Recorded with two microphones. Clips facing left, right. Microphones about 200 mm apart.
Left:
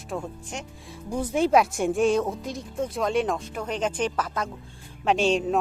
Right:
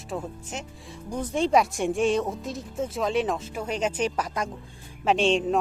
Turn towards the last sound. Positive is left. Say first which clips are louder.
# even
turn(degrees=0)  # may be behind; listen again after turning